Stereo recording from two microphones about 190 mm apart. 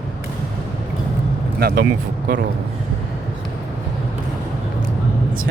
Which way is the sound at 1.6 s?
55° right (ahead or behind).